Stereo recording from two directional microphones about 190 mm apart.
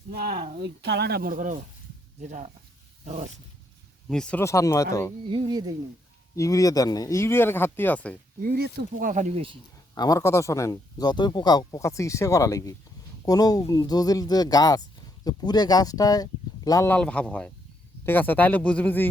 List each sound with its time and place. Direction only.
0.6 s speech: 60° right (ahead or behind); by 2.5 s 40° right (ahead or behind)
4.1 s speech: 5° left (ahead or behind)
5.3 s speech: 20° right (ahead or behind)
6.3 s speech: 15° left (ahead or behind)
8.4 s speech: 55° right (ahead or behind)
9.9 s speech: 15° left (ahead or behind)